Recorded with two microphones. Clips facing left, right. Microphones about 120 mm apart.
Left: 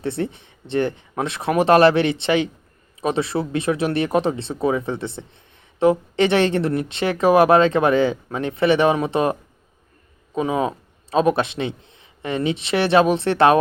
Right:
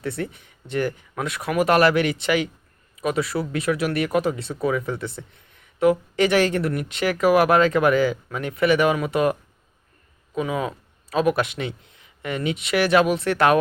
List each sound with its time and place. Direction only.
0.0 s a man's voice: 25° left (ahead or behind)